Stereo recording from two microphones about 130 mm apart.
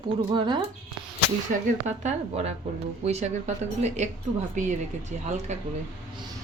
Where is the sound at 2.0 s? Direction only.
55° right (ahead or behind).